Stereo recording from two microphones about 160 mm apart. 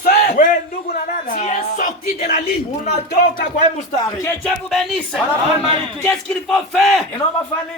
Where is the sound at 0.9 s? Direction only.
55° left (ahead or behind).